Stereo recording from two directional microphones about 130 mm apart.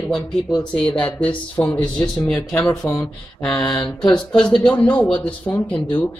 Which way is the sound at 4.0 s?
5° left (ahead or behind).